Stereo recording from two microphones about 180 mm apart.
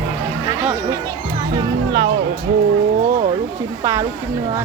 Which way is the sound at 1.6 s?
25° right (ahead or behind).